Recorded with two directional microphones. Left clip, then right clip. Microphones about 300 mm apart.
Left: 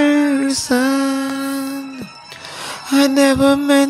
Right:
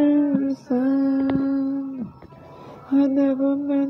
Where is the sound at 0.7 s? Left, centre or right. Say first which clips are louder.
Left 5 dB; centre.